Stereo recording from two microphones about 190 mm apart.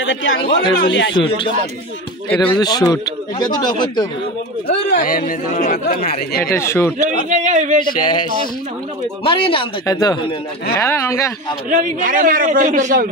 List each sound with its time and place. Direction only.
0.0 s a man's voice: 80° left
0.7 s speech: 65° left (ahead or behind)
1.1 s a man's voice: 25° left (ahead or behind)
4.8 s speech: 45° left (ahead or behind)
6.5 s speech: 15° left (ahead or behind)
7.1 s speech: 40° right (ahead or behind)
8.0 s a man's voice: 25° left (ahead or behind)
11.7 s a man's voice: 45° right (ahead or behind)